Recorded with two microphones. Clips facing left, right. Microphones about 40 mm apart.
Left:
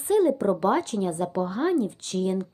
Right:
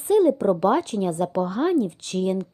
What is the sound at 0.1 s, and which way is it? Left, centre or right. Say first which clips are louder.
Speech: right 3 dB; right.